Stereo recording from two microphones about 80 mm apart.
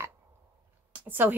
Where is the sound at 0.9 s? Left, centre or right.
Right.